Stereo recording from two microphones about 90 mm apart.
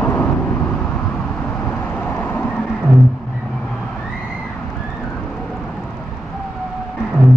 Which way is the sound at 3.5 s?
5° left (ahead or behind).